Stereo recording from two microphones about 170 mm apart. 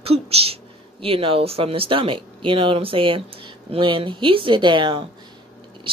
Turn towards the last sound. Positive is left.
turn(degrees=-30)  # may be behind; listen again after turning